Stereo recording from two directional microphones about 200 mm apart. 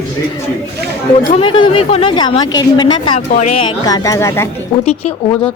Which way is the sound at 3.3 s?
35° left (ahead or behind).